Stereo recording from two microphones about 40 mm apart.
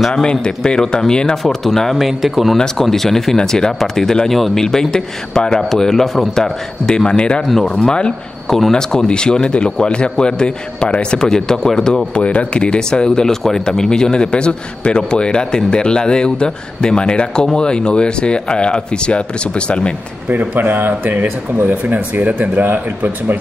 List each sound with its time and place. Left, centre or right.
0.1 s a man's voice: left
1.3 s speech: centre
2.0 s speech: centre
2.5 s speech: centre; by 7.4 s left
7.4 s speech: centre
8.7 s a man's voice: centre
12.2 s a man's voice: left
20.2 s speech: right